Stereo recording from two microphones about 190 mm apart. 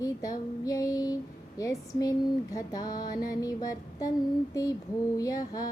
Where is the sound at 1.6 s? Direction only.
15° left (ahead or behind).